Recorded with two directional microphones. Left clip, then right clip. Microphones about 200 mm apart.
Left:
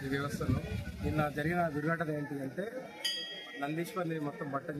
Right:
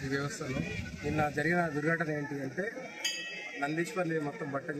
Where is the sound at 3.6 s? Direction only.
5° left (ahead or behind).